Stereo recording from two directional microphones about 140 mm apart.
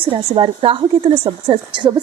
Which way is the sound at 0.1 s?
40° right (ahead or behind).